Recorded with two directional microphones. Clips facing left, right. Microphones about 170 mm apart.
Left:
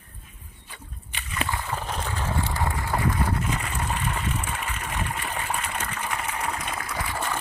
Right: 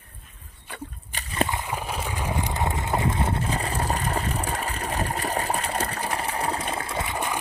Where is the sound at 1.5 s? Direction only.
10° right (ahead or behind).